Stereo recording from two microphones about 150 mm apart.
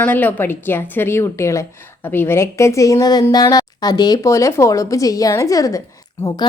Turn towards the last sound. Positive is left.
turn(degrees=25)  # may be behind; listen again after turning